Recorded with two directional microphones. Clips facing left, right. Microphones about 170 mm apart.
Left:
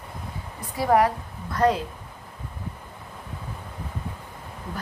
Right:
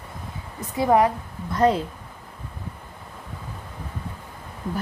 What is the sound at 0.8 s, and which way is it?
A woman's voice, 20° right (ahead or behind).